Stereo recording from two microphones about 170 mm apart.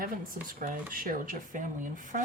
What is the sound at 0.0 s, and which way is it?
Speech, 55° right (ahead or behind).